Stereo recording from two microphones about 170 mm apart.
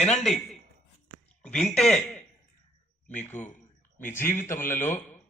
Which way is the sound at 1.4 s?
10° left (ahead or behind).